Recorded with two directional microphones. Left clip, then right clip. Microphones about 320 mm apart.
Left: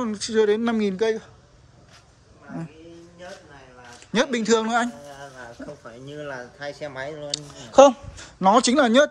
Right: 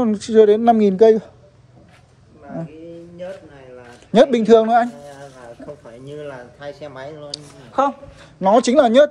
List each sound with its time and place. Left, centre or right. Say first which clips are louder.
0.0 s speech: right 8 dB; centre
4.1 s a man's voice: right 9 dB; centre
6.2 s speech: left 2 dB; left
8.4 s speech: right 4 dB; centre